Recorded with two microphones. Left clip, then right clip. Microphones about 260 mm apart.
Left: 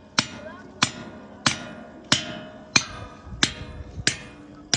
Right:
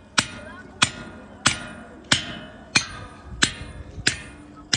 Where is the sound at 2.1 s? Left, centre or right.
Left.